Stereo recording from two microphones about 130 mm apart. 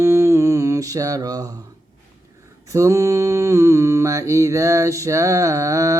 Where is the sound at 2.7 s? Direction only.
25° right (ahead or behind).